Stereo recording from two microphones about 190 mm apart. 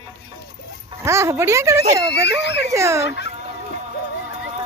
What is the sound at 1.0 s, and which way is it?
Speech, 15° right (ahead or behind).